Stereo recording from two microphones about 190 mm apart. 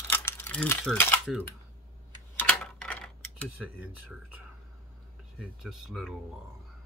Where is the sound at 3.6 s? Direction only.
5° right (ahead or behind).